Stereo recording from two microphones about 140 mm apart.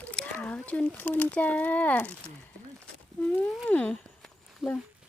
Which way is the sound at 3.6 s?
10° left (ahead or behind).